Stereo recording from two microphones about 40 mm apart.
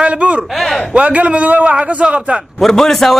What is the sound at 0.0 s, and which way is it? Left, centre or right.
A man's voice, right.